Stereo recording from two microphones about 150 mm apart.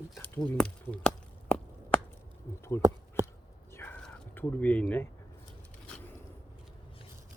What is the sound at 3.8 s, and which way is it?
Crow, 15° left (ahead or behind).